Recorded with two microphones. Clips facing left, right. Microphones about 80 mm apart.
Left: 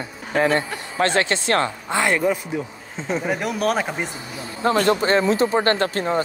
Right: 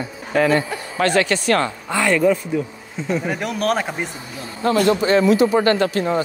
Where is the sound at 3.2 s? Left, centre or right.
Centre.